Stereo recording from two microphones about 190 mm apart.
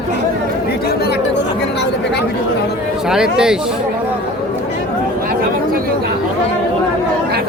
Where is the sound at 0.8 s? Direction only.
55° left (ahead or behind).